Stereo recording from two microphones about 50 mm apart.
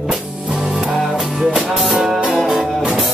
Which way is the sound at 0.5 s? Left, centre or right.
Centre.